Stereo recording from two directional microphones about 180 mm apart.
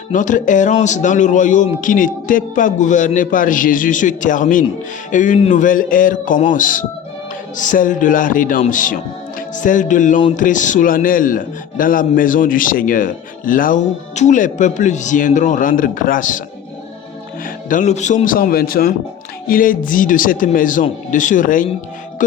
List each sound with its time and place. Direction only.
0.1 s a man's voice: 45° left (ahead or behind)
17.7 s a man's voice: 45° left (ahead or behind)